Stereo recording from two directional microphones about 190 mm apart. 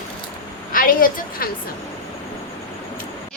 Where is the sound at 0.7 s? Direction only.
45° left (ahead or behind).